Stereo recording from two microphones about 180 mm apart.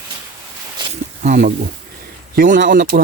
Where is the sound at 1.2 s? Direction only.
45° right (ahead or behind).